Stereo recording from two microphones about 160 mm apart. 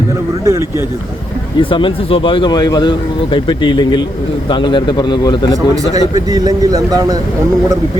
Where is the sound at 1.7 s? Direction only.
35° left (ahead or behind).